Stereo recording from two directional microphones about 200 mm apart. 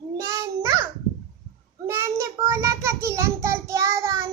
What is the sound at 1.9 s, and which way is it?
A child's voice, 10° right (ahead or behind).